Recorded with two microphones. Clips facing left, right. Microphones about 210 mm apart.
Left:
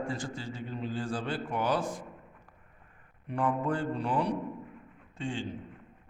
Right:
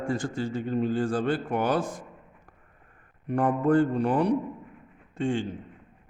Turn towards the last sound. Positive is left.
turn(degrees=-50)  # may be behind; listen again after turning